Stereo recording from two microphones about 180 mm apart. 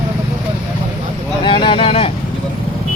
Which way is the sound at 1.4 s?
30° left (ahead or behind).